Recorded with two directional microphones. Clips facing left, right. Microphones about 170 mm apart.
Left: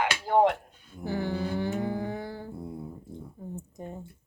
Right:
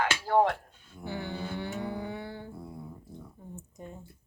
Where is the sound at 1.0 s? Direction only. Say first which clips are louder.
Left 6 dB; 40° left (ahead or behind).